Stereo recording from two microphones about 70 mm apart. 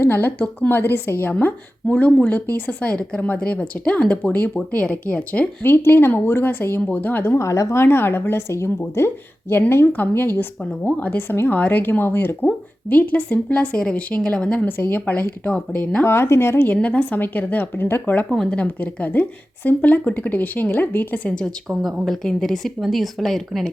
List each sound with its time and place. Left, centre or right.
0.0 s a woman's voice: left
1.3 s a woman's voice: left
5.6 s a woman's voice: left
7.3 s a woman's voice: left; by 14.6 s centre
14.6 s a woman's voice: left
16.0 s a woman's voice: left
16.8 s speech: left
21.7 s speech: centre